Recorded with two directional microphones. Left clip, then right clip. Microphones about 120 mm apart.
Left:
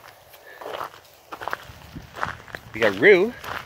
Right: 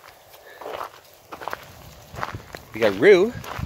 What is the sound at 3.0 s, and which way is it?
Speech, 25° right (ahead or behind).